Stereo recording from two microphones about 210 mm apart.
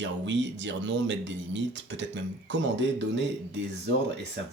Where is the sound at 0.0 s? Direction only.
60° right (ahead or behind).